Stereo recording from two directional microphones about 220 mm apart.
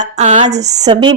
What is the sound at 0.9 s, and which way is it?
Speech, 20° right (ahead or behind).